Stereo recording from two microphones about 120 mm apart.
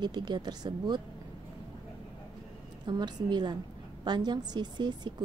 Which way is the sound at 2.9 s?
35° right (ahead or behind).